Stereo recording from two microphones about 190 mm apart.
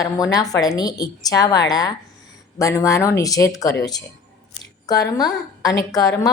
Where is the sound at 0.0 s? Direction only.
20° left (ahead or behind).